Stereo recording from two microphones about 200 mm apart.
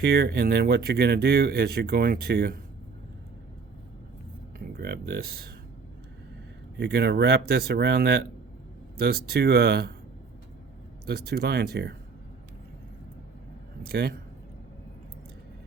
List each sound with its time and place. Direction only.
0.0 s speech: 50° right (ahead or behind)
4.8 s speech: 50° right (ahead or behind)
6.7 s speech: 55° right (ahead or behind)
11.0 s speech: 55° right (ahead or behind)
13.8 s speech: 50° right (ahead or behind)